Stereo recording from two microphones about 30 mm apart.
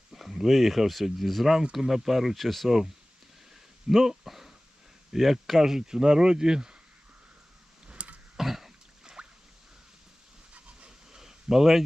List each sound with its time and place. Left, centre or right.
0.1 s speech: centre
2.6 s speech: centre
4.0 s speech: centre
5.5 s speech: centre
7.9 s throat clearing: right
8.4 s throat clearing: centre
9.2 s a sound: right
10.8 s a sound: centre